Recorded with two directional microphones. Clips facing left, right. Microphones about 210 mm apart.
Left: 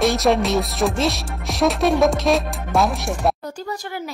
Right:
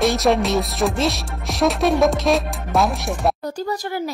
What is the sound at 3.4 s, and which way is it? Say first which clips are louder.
Speech: right 4 dB; 35° right (ahead or behind).